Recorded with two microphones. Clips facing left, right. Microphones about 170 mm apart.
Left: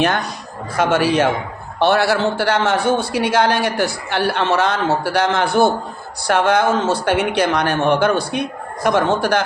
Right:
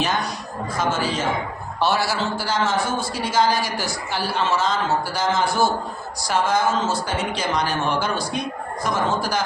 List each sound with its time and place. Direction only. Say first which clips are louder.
0.8 s a man's voice: left 9 dB; 70° left (ahead or behind)